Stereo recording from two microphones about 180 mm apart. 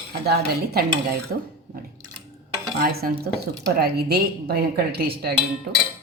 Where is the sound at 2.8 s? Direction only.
60° right (ahead or behind).